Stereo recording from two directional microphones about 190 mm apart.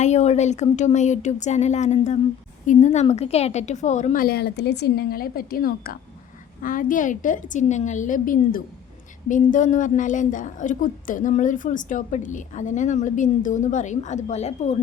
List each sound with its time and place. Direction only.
0.0 s a woman's voice: 35° left (ahead or behind)